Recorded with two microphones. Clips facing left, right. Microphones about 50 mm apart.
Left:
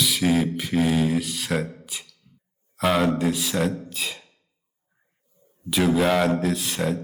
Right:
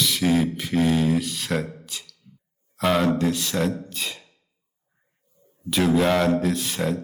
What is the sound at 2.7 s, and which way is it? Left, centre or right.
Speech, centre.